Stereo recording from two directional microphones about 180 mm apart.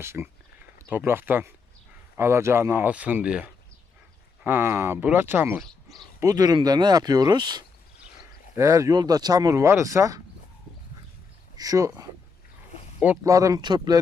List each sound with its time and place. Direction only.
0.0 s speech: 15° right (ahead or behind)
5.5 s speech: centre (ahead or behind)
6.1 s speech: 20° right (ahead or behind)
11.5 s speech: 20° right (ahead or behind)
13.3 s speech: 20° right (ahead or behind)